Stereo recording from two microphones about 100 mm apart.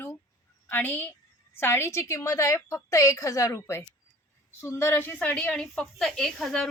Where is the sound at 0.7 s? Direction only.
20° left (ahead or behind).